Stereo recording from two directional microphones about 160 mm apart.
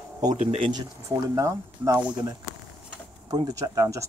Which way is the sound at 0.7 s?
20° right (ahead or behind).